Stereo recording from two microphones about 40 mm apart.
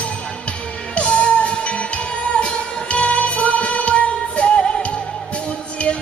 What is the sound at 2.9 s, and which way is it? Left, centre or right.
Music, left.